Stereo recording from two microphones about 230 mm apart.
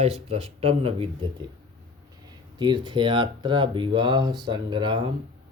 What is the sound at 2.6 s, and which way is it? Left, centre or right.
Speech, centre.